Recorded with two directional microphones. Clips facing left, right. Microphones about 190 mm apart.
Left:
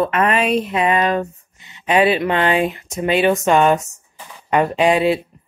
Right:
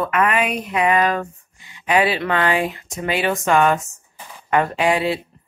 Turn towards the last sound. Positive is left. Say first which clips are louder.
# left 4 dB
turn(degrees=20)  # may be behind; listen again after turning